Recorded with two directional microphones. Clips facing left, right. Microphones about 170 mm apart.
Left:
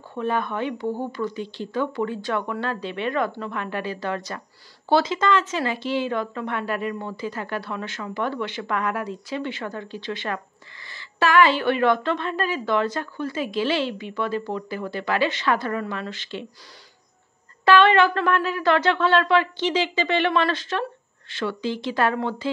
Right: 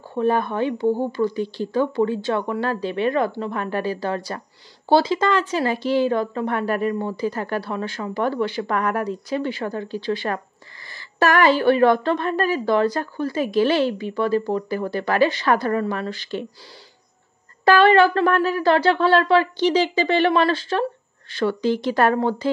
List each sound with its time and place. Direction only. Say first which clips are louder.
0.1 s speech: right 5 dB; 35° right (ahead or behind)
17.6 s speech: right 2 dB; 35° right (ahead or behind)